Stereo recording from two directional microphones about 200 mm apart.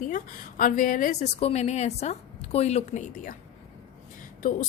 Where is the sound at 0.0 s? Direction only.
40° left (ahead or behind).